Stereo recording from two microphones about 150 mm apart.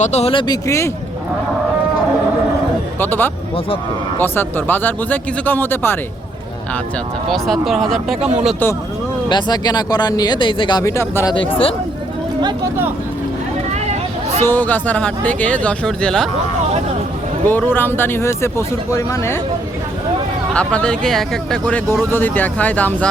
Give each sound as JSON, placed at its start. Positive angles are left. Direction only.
{"t": 0.0, "sound": "speech", "side_deg": 45}
{"t": 3.0, "sound": "speech", "side_deg": 15}
{"t": 7.3, "sound": "speech", "side_deg": 0}
{"t": 9.3, "sound": "speech", "side_deg": 25}
{"t": 11.3, "sound": "speech", "side_deg": 35}
{"t": 14.4, "sound": "speech", "side_deg": 10}
{"t": 17.4, "sound": "speech", "side_deg": 15}
{"t": 20.5, "sound": "speech", "side_deg": 5}